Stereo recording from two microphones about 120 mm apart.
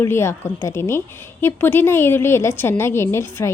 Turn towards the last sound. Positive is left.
turn(degrees=20)  # may be behind; listen again after turning